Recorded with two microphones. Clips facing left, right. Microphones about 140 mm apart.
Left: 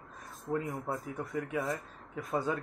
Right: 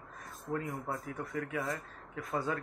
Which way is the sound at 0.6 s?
Centre (ahead or behind).